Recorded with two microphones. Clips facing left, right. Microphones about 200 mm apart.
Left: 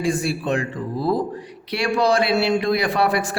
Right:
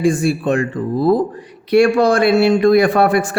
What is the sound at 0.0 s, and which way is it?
Speech, 50° right (ahead or behind).